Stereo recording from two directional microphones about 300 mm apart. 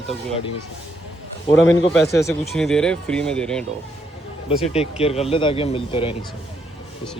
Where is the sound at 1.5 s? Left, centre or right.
Left.